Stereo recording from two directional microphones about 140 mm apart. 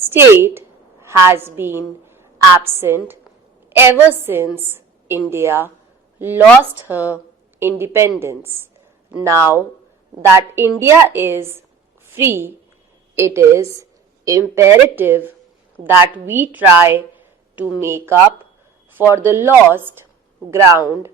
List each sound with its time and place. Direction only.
0.0 s a woman's voice: 15° right (ahead or behind)